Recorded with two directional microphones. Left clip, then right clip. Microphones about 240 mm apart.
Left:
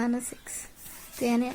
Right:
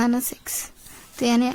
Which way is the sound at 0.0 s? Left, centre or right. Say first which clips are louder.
Right 7 dB; right.